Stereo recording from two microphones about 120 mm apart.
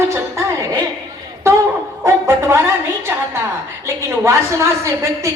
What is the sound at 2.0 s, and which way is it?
Speech, 20° right (ahead or behind).